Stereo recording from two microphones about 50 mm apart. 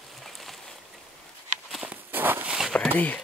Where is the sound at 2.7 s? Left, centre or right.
Left.